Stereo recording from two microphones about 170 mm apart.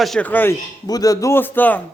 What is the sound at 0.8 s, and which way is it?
Speech, 20° left (ahead or behind).